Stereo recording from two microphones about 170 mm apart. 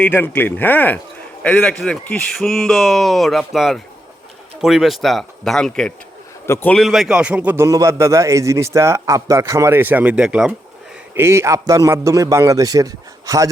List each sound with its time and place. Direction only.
0.0 s speech: 10° left (ahead or behind)
6.4 s a man's voice: 15° left (ahead or behind)
6.7 s a man's voice: centre (ahead or behind); by 13.5 s 20° right (ahead or behind)